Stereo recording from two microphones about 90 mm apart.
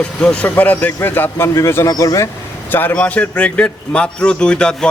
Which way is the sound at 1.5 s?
30° left (ahead or behind).